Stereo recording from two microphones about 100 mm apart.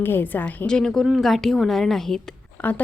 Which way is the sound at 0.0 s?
20° left (ahead or behind).